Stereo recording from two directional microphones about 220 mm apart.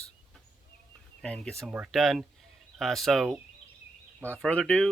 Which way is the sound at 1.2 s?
5° left (ahead or behind).